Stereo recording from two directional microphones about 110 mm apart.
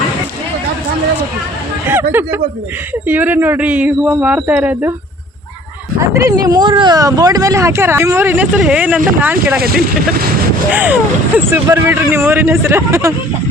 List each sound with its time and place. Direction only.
1.9 s speech: 20° right (ahead or behind)
6.0 s speech: 25° right (ahead or behind)
10.7 s speech: 15° right (ahead or behind)